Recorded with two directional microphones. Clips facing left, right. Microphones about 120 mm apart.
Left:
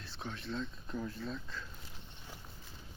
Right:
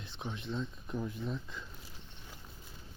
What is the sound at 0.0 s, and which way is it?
Speech, 15° right (ahead or behind).